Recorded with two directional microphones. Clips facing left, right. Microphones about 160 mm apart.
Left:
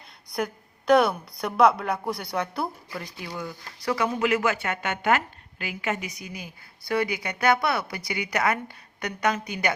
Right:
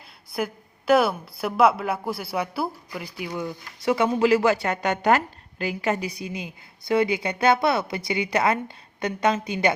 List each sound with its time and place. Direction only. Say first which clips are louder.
0.3 s a woman's voice: right 1 dB; 5° right (ahead or behind)
3.4 s speech: right 5 dB; 25° right (ahead or behind)